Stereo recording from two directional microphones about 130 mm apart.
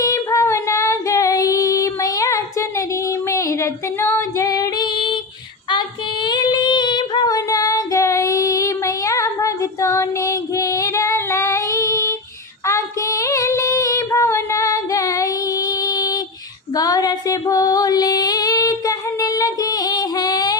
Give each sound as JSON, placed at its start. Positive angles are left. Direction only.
{"t": 0.0, "sound": "female singing", "side_deg": 25}
{"t": 6.2, "sound": "female singing", "side_deg": 35}
{"t": 16.7, "sound": "music", "side_deg": 30}